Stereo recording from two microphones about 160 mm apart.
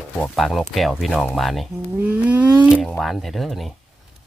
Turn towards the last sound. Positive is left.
turn(degrees=0)  # may be behind; listen again after turning